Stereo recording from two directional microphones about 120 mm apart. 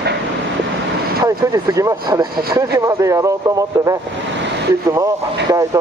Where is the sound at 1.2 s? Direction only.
30° right (ahead or behind).